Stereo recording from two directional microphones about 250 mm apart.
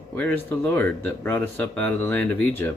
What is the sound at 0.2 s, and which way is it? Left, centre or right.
Speech, centre.